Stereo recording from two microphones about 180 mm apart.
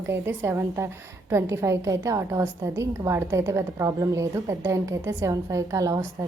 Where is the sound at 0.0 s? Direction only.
15° right (ahead or behind).